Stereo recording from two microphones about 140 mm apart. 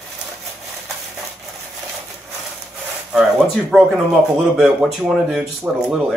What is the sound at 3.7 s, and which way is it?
Speech, centre (ahead or behind).